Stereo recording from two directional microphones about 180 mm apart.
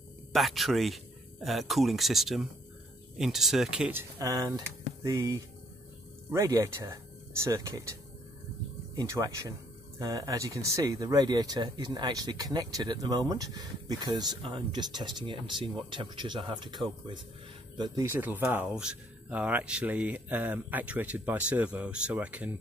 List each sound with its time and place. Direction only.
0.3 s speech: centre (ahead or behind)
4.2 s speech: 20° right (ahead or behind)